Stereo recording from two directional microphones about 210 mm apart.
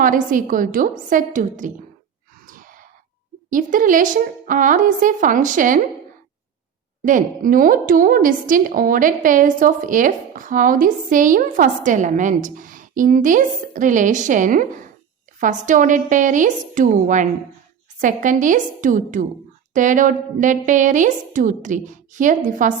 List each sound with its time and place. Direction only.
0.0 s a woman's voice: 40° right (ahead or behind)
2.5 s sigh: 40° right (ahead or behind)
3.5 s a woman's voice: 40° right (ahead or behind)
7.0 s a woman's voice: 40° right (ahead or behind)